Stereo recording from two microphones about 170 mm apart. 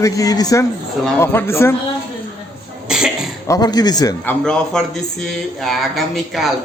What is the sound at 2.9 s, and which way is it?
Cough, 5° right (ahead or behind).